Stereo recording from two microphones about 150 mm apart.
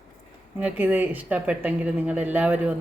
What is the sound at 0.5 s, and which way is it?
Speech, 10° right (ahead or behind).